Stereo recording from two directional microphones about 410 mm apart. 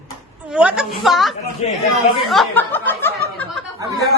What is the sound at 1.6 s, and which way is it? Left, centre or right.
Speech, centre.